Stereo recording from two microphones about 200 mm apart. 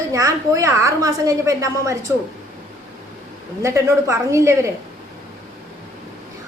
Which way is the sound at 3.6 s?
15° right (ahead or behind).